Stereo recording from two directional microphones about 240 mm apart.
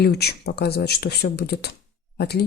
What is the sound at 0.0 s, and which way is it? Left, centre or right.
Speech, left.